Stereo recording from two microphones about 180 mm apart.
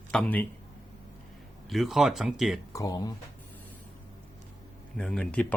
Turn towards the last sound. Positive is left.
turn(degrees=5)  # may be behind; listen again after turning